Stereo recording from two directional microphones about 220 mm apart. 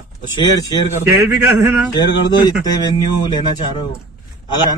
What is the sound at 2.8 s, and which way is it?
Speech, 20° left (ahead or behind).